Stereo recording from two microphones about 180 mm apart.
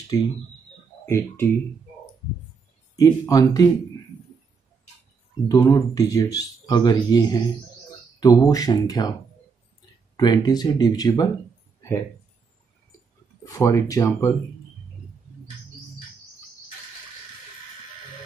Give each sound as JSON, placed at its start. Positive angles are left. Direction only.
{"t": 0.1, "sound": "speech", "side_deg": 20}
{"t": 3.0, "sound": "speech", "side_deg": 20}
{"t": 5.5, "sound": "speech", "side_deg": 20}
{"t": 10.1, "sound": "speech", "side_deg": 25}
{"t": 13.4, "sound": "speech", "side_deg": 15}